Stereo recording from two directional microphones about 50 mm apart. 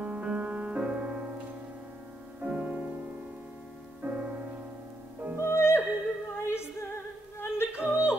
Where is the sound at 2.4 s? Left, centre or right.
Right.